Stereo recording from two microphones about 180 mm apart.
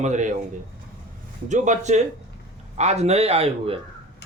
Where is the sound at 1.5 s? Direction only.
40° right (ahead or behind).